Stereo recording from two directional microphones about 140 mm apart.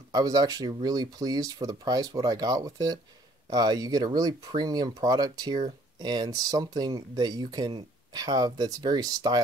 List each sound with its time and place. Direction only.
0.1 s speech: 30° right (ahead or behind)